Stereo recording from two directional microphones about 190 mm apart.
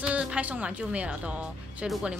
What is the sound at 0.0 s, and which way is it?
Speech, 5° right (ahead or behind).